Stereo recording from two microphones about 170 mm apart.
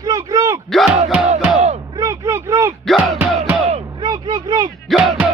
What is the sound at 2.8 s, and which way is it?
Music, centre (ahead or behind).